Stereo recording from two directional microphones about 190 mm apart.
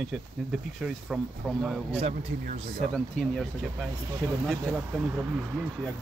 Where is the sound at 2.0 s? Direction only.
40° right (ahead or behind).